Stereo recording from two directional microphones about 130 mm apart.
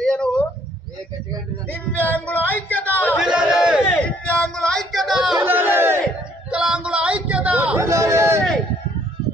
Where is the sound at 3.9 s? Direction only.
10° left (ahead or behind).